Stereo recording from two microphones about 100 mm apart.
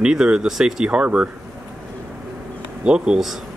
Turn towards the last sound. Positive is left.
turn(degrees=-5)  # may be behind; listen again after turning